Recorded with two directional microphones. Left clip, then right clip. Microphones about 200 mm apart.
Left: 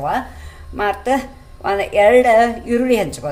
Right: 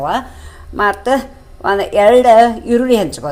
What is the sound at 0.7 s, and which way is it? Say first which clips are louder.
Speech: right 4 dB; 25° right (ahead or behind).